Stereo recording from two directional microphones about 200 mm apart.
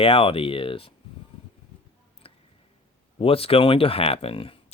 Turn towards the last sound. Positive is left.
turn(degrees=30)  # may be behind; listen again after turning